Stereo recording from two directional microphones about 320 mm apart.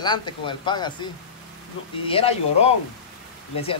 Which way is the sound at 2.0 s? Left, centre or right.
Centre.